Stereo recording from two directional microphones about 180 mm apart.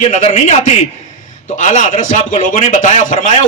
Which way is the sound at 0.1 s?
40° left (ahead or behind).